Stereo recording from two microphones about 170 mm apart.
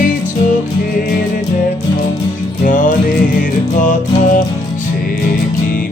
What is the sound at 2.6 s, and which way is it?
Music, 50° left (ahead or behind).